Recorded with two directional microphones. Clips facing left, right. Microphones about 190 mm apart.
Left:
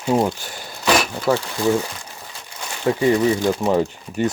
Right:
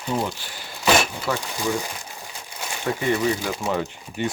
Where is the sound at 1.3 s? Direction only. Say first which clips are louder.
Left 9 dB; 40° left (ahead or behind).